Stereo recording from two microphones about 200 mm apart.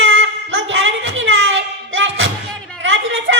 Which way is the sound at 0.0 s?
75° right (ahead or behind).